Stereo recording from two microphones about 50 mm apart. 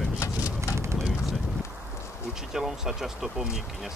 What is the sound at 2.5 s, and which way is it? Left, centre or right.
Speech, centre.